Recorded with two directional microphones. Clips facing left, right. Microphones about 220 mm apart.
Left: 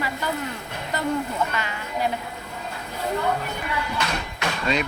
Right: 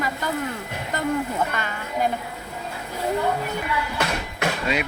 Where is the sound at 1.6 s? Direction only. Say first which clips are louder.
Right 2 dB; 50° right (ahead or behind).